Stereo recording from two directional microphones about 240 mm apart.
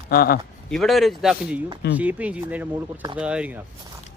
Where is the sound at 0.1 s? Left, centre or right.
Left.